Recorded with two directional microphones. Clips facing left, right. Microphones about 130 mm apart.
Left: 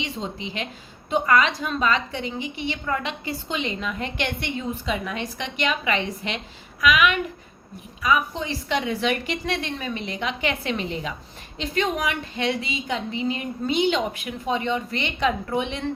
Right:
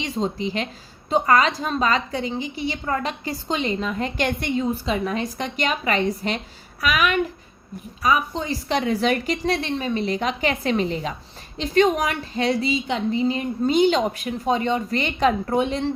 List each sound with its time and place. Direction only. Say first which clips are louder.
0.0 s a woman's voice: right 6 dB; 40° right (ahead or behind)